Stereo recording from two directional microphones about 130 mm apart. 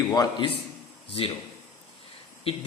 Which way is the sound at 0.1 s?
30° left (ahead or behind).